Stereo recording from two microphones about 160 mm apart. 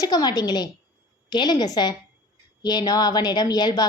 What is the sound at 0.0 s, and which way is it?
A woman's voice, 25° left (ahead or behind).